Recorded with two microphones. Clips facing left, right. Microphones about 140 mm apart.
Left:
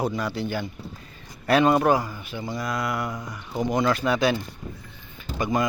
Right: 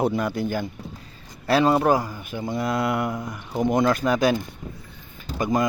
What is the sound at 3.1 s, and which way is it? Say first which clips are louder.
Speech: right 4 dB; 5° right (ahead or behind).